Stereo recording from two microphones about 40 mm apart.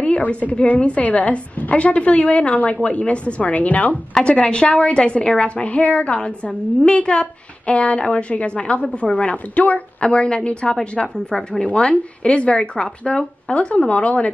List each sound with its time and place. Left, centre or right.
0.0 s a woman's voice: left
4.2 s a woman's voice: left